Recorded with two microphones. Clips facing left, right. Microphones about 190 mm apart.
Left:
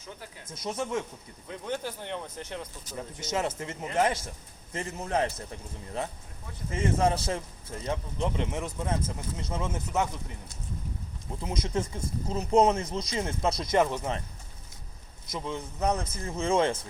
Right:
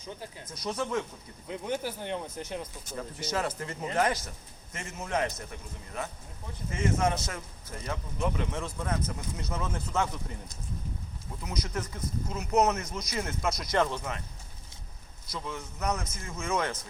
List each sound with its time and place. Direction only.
0.0 s speech: 20° right (ahead or behind)
0.8 s speech: 25° left (ahead or behind)
1.5 s speech: 15° right (ahead or behind)
3.2 s speech: 20° left (ahead or behind)
4.7 s a man's voice: 35° left (ahead or behind)
11.3 s speech: 25° left (ahead or behind)
15.3 s speech: 25° left (ahead or behind)